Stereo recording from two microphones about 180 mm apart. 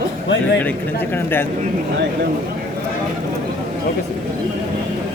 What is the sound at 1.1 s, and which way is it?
Speech, 10° left (ahead or behind).